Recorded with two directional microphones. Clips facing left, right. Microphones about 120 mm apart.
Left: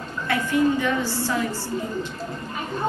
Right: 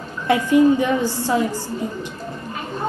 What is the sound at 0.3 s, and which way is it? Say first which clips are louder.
A woman's voice: right 7 dB; 15° right (ahead or behind).